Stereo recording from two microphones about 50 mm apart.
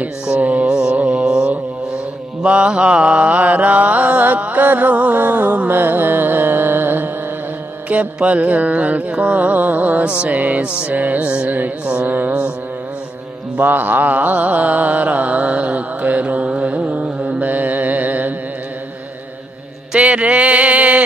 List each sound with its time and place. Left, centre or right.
0.4 s mantra: right
0.7 s carnatic music: centre
0.9 s mantra: centre
5.7 s carnatic music: right
7.9 s music: right
11.8 s mantra: right
13.6 s mantra: right
19.9 s a sound: right